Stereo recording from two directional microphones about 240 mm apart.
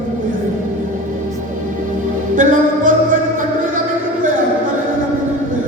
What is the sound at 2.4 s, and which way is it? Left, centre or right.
Music, right.